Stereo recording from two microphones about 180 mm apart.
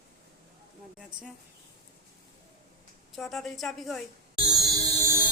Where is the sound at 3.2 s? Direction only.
Centre (ahead or behind).